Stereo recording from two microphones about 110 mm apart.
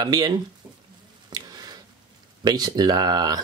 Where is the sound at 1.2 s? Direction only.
35° right (ahead or behind).